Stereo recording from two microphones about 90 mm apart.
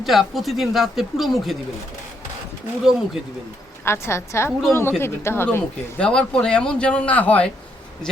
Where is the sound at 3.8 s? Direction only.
30° left (ahead or behind).